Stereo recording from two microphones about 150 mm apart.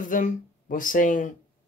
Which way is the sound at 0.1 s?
60° left (ahead or behind).